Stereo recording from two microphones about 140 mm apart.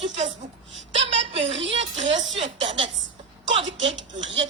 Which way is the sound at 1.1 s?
45° right (ahead or behind).